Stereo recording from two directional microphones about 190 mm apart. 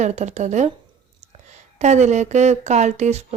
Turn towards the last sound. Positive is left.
turn(degrees=-35)  # may be behind; listen again after turning